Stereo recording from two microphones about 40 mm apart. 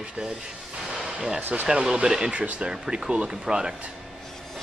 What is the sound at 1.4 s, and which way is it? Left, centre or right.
Speech, right.